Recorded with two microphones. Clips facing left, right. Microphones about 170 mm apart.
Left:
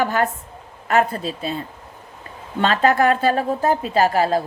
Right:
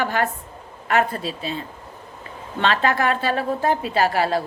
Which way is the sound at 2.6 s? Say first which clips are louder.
Left 4 dB; 40° left (ahead or behind).